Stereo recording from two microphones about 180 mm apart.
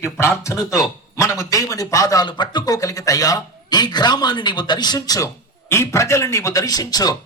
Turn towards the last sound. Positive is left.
turn(degrees=20)  # may be behind; listen again after turning